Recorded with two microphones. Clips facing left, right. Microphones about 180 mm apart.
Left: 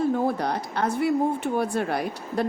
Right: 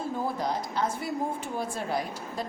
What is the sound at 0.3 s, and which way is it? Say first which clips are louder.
A woman's voice: left 4 dB; 65° left (ahead or behind).